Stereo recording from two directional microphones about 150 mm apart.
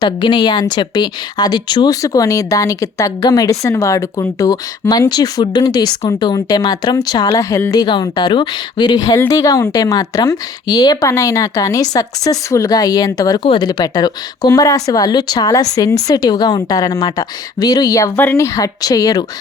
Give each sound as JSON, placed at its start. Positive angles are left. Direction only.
{"t": 0.0, "sound": "a woman's voice", "side_deg": 30}